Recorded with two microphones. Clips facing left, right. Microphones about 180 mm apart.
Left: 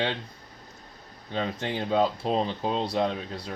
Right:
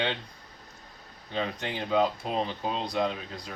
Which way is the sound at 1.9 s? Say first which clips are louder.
Left 2 dB; 30° left (ahead or behind).